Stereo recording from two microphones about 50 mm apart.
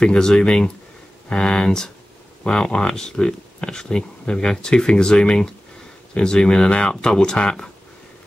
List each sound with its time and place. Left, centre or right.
0.0 s speech: centre